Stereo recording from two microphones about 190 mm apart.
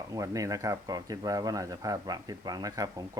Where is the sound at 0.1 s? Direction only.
15° right (ahead or behind).